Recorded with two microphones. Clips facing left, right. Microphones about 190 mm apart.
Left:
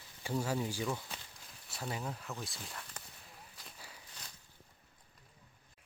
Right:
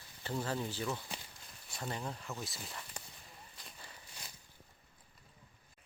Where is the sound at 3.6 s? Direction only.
5° left (ahead or behind).